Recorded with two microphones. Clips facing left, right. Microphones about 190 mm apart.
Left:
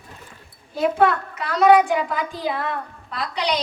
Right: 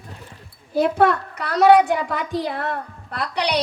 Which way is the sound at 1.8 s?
70° right (ahead or behind).